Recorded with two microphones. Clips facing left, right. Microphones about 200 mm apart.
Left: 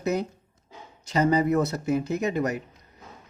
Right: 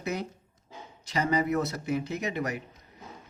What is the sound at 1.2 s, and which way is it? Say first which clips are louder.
A man's voice: left 5 dB; 45° left (ahead or behind).